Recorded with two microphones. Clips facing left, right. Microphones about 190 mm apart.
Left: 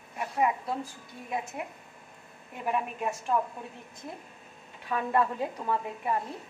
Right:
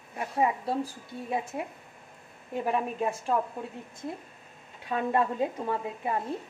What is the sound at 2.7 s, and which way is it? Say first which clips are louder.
Speech: right 1 dB; 35° right (ahead or behind).